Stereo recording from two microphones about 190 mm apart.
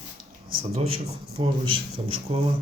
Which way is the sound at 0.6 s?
30° right (ahead or behind).